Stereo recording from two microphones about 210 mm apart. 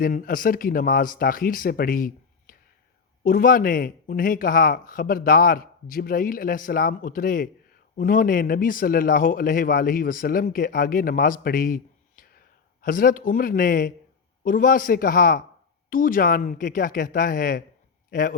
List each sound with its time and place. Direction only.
0.0 s a man's voice: 40° left (ahead or behind)